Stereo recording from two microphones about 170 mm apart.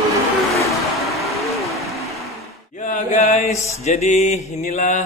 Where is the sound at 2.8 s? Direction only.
45° left (ahead or behind).